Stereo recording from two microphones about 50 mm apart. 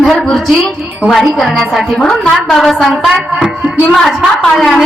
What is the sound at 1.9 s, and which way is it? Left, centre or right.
Speech, centre.